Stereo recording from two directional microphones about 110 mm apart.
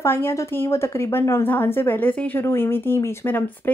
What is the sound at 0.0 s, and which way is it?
Speech, 25° left (ahead or behind).